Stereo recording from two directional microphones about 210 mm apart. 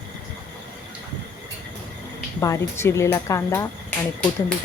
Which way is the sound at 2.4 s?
15° left (ahead or behind).